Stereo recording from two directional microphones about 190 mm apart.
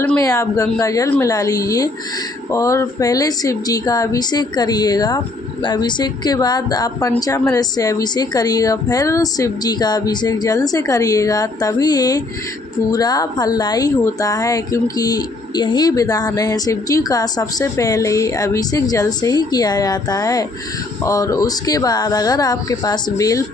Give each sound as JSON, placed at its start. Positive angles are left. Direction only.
{"t": 0.0, "sound": "speech", "side_deg": 15}